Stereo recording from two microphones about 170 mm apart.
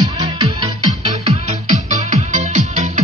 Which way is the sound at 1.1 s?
45° right (ahead or behind).